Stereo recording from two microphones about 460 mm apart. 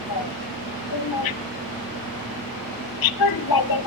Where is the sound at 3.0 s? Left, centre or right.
Left.